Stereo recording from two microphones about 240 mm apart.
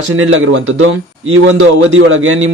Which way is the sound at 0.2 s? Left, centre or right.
Right.